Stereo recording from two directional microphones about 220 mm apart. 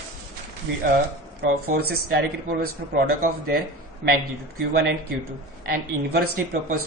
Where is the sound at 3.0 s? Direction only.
40° right (ahead or behind).